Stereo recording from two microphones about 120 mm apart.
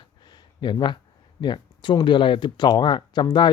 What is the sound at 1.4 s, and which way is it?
Speech, 40° left (ahead or behind).